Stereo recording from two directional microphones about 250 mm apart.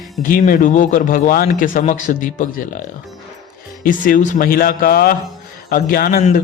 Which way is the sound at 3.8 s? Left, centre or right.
Left.